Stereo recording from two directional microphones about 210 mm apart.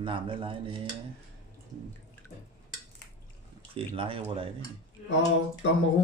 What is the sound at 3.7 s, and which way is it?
Speech, 25° right (ahead or behind).